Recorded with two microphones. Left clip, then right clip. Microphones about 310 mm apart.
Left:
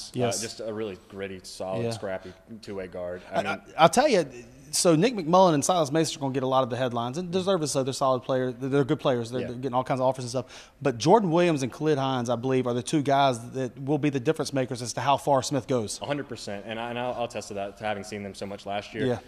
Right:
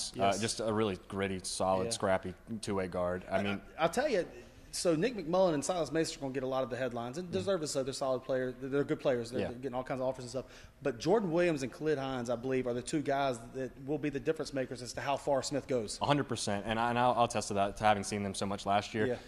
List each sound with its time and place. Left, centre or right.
0.2 s speech: right
3.3 s a man's voice: left
16.0 s a man's voice: centre